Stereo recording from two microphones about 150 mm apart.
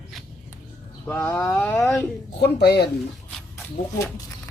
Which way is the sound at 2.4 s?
90° left.